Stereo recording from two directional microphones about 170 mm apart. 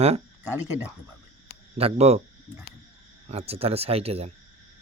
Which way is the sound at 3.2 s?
35° right (ahead or behind).